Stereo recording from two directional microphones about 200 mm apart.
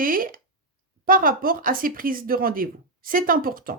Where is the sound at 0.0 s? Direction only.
45° right (ahead or behind).